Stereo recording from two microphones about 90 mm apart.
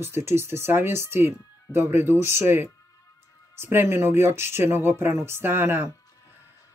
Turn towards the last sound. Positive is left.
turn(degrees=-25)  # may be behind; listen again after turning